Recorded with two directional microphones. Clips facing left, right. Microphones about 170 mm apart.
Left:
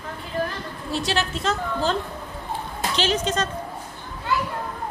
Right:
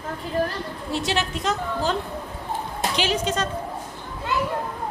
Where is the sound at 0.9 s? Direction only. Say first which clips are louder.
Even; 20° right (ahead or behind).